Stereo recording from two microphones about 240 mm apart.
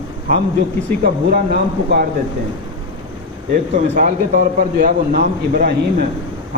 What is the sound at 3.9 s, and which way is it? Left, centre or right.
A man's voice, right.